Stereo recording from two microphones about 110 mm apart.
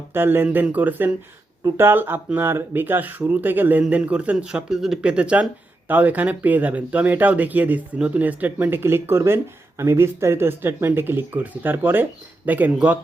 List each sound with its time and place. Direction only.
0.1 s speech: 20° right (ahead or behind)